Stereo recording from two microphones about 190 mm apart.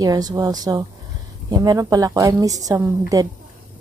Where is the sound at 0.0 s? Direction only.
20° right (ahead or behind).